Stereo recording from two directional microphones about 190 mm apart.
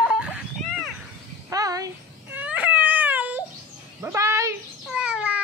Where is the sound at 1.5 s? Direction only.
20° right (ahead or behind).